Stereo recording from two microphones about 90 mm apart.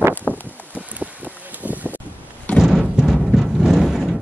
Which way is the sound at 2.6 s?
5° right (ahead or behind).